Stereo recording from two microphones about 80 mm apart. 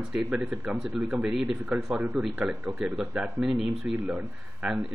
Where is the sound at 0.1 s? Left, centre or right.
Centre.